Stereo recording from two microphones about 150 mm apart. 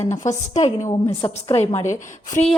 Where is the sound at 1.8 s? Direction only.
55° left (ahead or behind).